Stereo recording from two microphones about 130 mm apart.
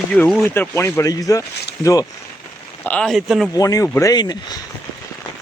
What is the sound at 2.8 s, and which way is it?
Speech, 10° left (ahead or behind).